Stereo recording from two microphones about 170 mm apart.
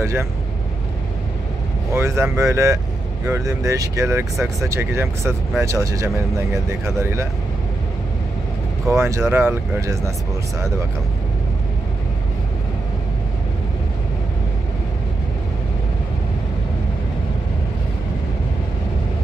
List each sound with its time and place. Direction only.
0.0 s speech: 15° right (ahead or behind)
2.0 s speech: 15° right (ahead or behind)
8.8 s speech: 15° right (ahead or behind)